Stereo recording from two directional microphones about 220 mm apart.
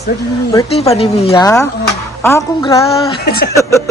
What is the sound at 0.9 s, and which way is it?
Speech, 30° left (ahead or behind).